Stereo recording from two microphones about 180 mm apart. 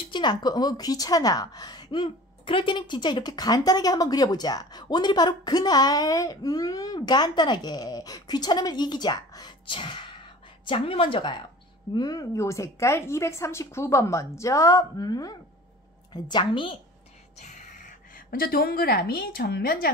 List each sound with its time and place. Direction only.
0.1 s a woman's voice: 25° left (ahead or behind)
17.4 s a woman's voice: 40° left (ahead or behind)